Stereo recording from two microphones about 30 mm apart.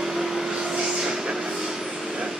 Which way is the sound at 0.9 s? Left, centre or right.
Right.